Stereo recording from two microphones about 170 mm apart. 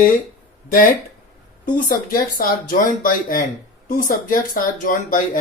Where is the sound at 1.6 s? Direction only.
55° left (ahead or behind).